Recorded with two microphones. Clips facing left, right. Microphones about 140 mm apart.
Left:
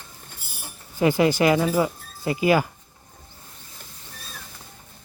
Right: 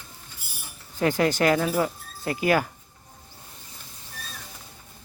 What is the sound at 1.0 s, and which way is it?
Speech, 10° left (ahead or behind).